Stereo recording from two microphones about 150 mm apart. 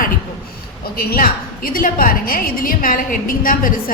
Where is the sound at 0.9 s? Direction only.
80° left.